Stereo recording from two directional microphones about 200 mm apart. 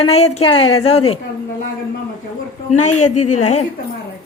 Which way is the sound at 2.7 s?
35° left (ahead or behind).